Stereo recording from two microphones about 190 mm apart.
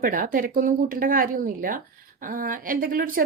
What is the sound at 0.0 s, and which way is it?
A woman's voice, 45° right (ahead or behind).